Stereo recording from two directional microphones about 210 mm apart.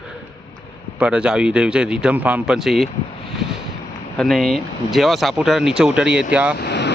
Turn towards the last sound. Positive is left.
turn(degrees=55)  # may be behind; listen again after turning